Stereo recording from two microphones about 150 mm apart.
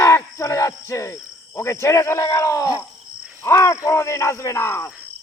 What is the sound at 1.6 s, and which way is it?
Speech, 20° left (ahead or behind).